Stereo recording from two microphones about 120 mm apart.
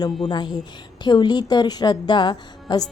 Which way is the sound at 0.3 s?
35° left (ahead or behind).